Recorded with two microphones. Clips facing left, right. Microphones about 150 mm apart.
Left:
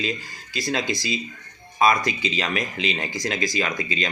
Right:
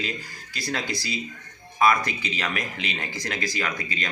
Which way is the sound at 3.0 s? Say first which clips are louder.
Left 4 dB; 15° left (ahead or behind).